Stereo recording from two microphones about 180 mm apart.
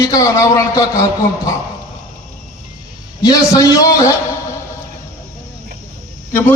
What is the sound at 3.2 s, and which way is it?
Speech, 20° left (ahead or behind).